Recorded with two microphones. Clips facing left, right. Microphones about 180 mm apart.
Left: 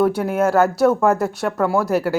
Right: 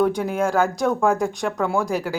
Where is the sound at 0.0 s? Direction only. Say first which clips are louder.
Left 3 dB; 5° left (ahead or behind).